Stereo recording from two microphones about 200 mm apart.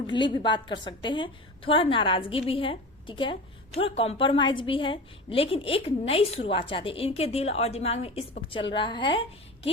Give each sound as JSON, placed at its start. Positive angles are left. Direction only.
{"t": 0.1, "sound": "a woman's voice", "side_deg": 25}